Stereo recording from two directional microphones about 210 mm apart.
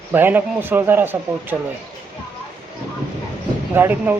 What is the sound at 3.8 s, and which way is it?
Speech, 10° right (ahead or behind).